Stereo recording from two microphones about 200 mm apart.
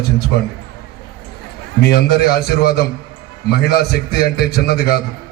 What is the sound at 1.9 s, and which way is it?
A man's voice, 50° left (ahead or behind).